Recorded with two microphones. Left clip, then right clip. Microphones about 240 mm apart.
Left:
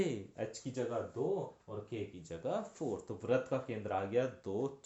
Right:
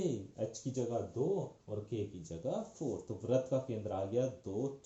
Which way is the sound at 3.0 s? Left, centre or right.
Left.